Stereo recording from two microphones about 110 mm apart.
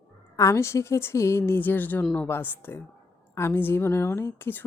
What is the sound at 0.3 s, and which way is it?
A woman's voice, 25° left (ahead or behind).